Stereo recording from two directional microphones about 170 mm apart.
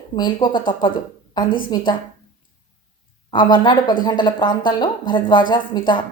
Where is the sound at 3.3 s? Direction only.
25° left (ahead or behind).